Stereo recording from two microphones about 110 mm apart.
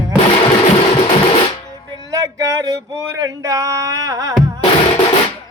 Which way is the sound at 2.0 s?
30° right (ahead or behind).